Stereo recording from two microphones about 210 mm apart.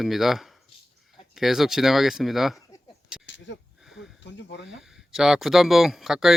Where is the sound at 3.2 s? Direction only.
60° left (ahead or behind).